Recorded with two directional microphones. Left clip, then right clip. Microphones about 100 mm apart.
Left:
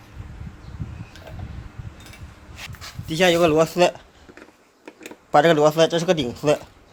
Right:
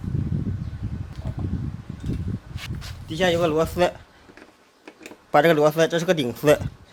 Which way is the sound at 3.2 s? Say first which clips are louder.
Left 4 dB; 90° left.